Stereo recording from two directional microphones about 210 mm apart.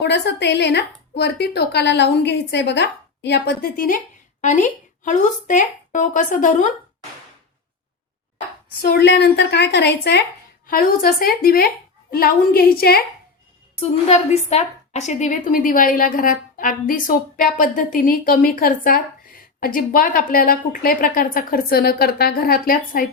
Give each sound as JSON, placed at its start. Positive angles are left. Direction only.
{"t": 0.0, "sound": "a woman's voice", "side_deg": 55}
{"t": 8.8, "sound": "a woman's voice", "side_deg": 50}
{"t": 13.7, "sound": "a woman's voice", "side_deg": 30}